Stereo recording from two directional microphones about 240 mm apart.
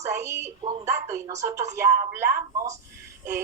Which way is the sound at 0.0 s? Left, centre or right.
Centre.